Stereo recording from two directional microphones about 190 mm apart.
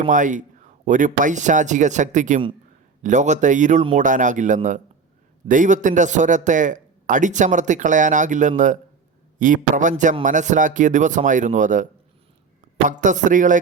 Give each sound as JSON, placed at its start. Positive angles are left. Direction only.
{"t": 0.1, "sound": "speech", "side_deg": -40}